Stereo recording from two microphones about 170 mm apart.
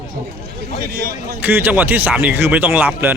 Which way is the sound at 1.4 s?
10° right (ahead or behind).